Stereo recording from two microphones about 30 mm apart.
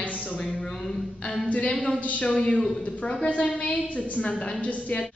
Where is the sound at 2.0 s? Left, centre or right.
Left.